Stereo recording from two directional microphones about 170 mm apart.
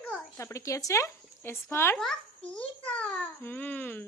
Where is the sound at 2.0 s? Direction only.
5° left (ahead or behind).